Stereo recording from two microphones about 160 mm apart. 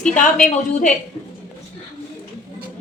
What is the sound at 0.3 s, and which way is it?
Speech, 50° left (ahead or behind).